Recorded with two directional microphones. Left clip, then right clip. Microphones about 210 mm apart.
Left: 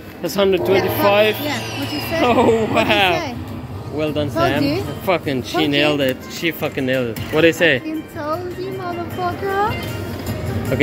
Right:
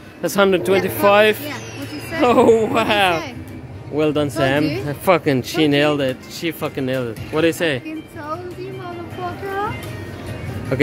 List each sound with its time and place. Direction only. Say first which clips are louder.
0.2 s speech: right 1 dB; 40° right (ahead or behind)
0.7 s speech: left 2 dB; 10° left (ahead or behind)
1.0 s speech: right 3 dB; 40° right (ahead or behind); by 7.8 s 15° right (ahead or behind)
10.7 s speech: even; 25° right (ahead or behind)